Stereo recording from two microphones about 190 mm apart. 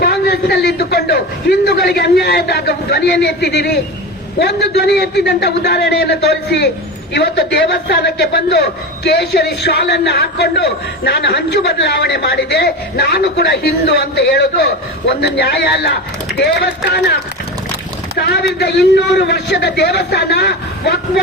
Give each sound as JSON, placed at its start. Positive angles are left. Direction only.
{"t": 0.0, "sound": "a man's voice", "side_deg": 55}
{"t": 18.3, "sound": "a man's voice", "side_deg": 60}